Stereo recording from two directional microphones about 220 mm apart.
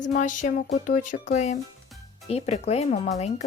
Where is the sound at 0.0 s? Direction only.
35° left (ahead or behind).